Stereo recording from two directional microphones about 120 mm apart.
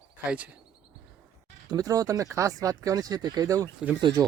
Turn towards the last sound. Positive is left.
turn(degrees=-35)  # may be behind; listen again after turning